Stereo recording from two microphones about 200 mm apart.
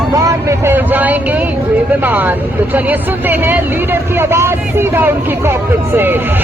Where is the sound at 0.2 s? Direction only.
15° right (ahead or behind).